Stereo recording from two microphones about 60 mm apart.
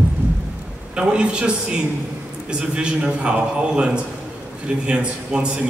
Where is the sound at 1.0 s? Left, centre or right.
Centre.